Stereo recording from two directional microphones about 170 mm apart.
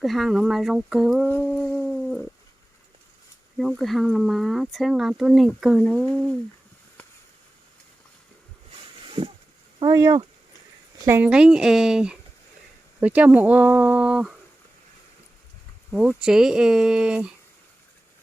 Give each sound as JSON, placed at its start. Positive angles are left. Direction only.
{"t": 0.0, "sound": "speech", "side_deg": 0}
{"t": 3.6, "sound": "speech", "side_deg": 0}
{"t": 8.7, "sound": "a sound", "side_deg": -30}
{"t": 9.9, "sound": "speech", "side_deg": -20}
{"t": 15.9, "sound": "speech", "side_deg": -5}